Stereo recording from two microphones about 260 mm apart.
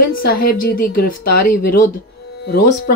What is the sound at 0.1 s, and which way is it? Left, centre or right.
A woman's voice, left.